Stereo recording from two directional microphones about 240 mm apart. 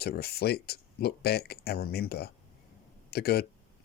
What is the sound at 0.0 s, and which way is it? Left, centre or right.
Speech, left.